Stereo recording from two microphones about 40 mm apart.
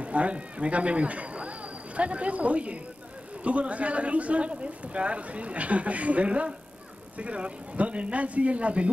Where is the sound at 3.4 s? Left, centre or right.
Right.